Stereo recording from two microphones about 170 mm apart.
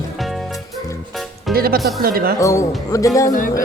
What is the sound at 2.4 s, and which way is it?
Speech, 20° left (ahead or behind).